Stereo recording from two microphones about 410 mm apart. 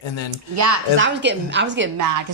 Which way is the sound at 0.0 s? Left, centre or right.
Left.